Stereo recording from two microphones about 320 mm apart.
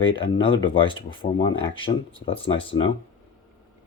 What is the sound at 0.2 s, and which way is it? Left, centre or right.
Speech, centre.